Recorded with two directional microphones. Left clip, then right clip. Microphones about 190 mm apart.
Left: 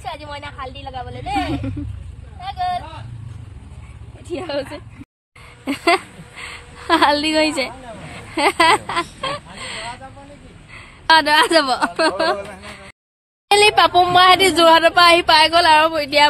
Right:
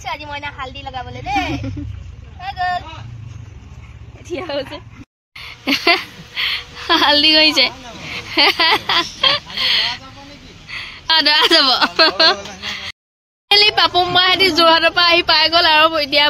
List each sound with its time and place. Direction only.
0.1 s vehicle: 15° left (ahead or behind)
1.1 s speech: 25° left (ahead or behind)
4.3 s speech: centre (ahead or behind)
5.4 s a sound: 5° right (ahead or behind)
10.7 s a woman's voice: 5° right (ahead or behind)
12.5 s a sound: 5° right (ahead or behind)
13.5 s speech: 5° left (ahead or behind)